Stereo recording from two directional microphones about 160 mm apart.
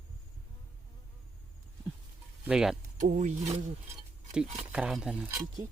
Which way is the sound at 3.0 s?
50° right (ahead or behind).